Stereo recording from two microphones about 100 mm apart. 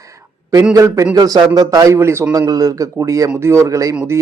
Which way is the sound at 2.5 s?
40° right (ahead or behind).